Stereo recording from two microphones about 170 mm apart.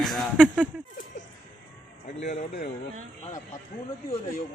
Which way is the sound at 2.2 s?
45° left (ahead or behind).